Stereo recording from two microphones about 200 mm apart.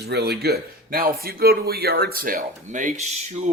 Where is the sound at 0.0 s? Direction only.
55° right (ahead or behind).